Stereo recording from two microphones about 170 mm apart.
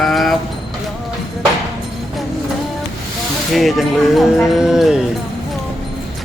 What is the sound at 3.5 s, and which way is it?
Speech, centre (ahead or behind).